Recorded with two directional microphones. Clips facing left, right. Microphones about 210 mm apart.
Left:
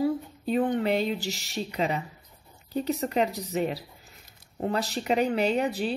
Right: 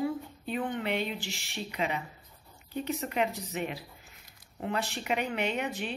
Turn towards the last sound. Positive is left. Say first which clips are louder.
# left 7 dB
turn(degrees=35)  # may be behind; listen again after turning